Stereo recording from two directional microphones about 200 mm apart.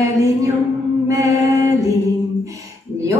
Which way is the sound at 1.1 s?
15° right (ahead or behind).